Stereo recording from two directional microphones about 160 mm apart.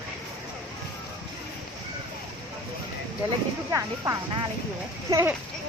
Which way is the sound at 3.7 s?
20° right (ahead or behind).